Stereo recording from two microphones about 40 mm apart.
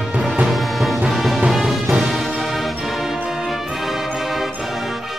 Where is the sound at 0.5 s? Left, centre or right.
Centre.